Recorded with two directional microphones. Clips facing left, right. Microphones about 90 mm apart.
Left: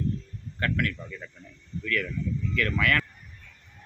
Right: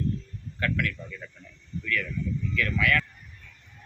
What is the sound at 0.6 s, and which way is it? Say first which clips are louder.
Speech: left 1 dB; 40° left (ahead or behind).